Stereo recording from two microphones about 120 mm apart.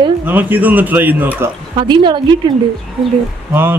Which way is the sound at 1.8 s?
40° right (ahead or behind).